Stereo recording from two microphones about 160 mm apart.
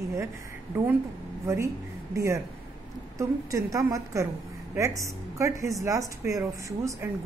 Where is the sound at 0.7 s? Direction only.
15° right (ahead or behind).